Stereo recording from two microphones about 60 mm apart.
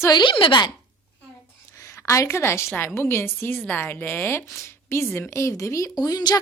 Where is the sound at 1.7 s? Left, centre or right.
Left.